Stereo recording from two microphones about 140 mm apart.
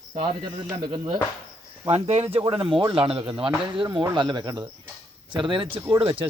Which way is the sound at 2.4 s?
35° right (ahead or behind).